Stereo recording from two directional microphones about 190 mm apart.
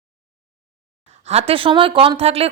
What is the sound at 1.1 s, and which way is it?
A woman's voice, 35° right (ahead or behind).